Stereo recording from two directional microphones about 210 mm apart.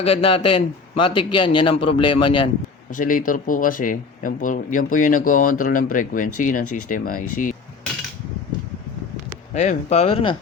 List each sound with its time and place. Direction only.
0.0 s a man's voice: 25° left (ahead or behind)
2.9 s speech: 40° left (ahead or behind)
9.6 s speech: 35° left (ahead or behind)